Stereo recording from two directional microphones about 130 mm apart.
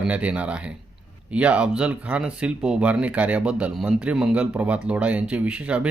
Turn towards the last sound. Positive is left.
turn(degrees=-10)  # may be behind; listen again after turning